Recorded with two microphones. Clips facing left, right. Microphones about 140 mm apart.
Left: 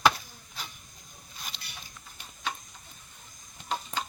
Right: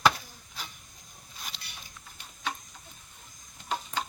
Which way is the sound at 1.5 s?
5° right (ahead or behind).